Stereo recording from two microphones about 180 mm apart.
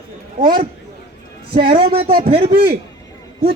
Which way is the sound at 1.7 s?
30° right (ahead or behind).